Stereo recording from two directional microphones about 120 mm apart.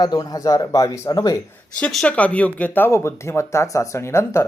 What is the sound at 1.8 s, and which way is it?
Speech, 5° left (ahead or behind).